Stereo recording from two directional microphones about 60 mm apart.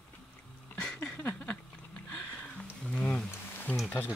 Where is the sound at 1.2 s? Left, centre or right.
Left.